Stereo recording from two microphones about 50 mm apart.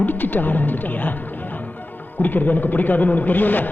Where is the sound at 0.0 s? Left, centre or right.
Left.